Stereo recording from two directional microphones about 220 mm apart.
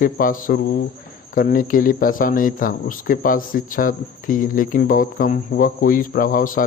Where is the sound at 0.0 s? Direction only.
40° left (ahead or behind).